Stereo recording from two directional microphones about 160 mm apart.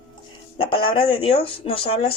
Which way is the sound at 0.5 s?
35° left (ahead or behind).